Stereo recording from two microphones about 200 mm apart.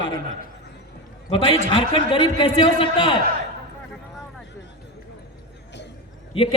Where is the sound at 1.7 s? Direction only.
25° left (ahead or behind).